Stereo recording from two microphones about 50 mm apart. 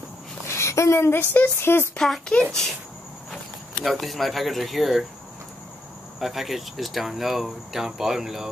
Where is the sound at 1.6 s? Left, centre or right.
Left.